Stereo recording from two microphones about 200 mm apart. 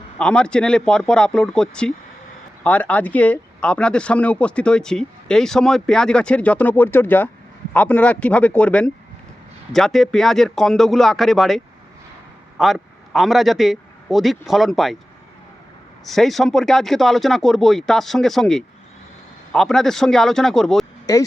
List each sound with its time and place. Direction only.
0.2 s a man's voice: 5° left (ahead or behind)
16.0 s speech: centre (ahead or behind)
21.1 s speech: 15° left (ahead or behind)